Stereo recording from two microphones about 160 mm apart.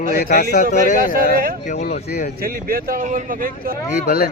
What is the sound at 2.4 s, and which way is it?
Speech, 65° right (ahead or behind).